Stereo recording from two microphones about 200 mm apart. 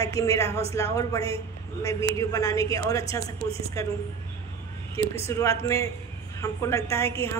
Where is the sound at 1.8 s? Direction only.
15° left (ahead or behind).